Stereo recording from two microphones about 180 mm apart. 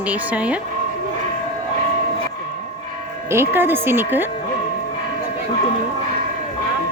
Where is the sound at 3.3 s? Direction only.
10° right (ahead or behind).